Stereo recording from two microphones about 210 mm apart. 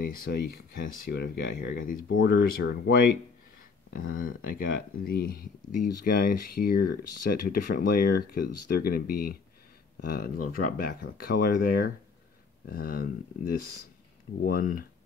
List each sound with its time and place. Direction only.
0.1 s speech: 45° left (ahead or behind)
2.0 s speech: 60° left (ahead or behind)
2.3 s speech: 45° left (ahead or behind)